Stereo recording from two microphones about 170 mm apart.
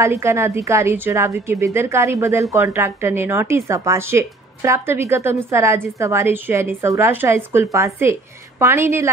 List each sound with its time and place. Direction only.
0.0 s a woman's voice: 15° right (ahead or behind)